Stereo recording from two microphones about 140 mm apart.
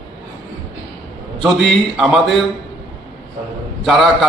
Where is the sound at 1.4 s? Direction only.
5° left (ahead or behind).